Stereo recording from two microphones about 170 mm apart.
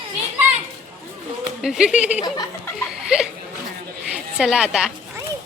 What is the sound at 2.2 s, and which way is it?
Speech, 25° left (ahead or behind).